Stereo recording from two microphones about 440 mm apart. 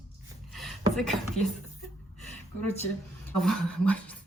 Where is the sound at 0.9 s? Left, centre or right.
Centre.